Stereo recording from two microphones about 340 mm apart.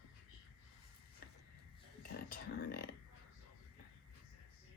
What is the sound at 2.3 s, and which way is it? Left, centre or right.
Speech, left.